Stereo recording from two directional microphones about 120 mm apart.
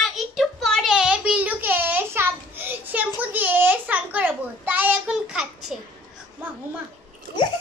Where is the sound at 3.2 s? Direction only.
15° right (ahead or behind).